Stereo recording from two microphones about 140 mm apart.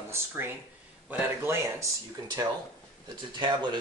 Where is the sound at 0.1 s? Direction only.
15° right (ahead or behind).